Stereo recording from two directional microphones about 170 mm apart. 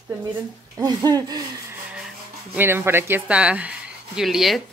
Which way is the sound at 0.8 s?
20° right (ahead or behind).